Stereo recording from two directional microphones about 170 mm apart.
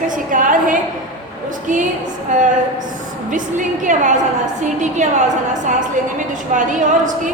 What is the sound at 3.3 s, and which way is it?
A woman's voice, 50° right (ahead or behind).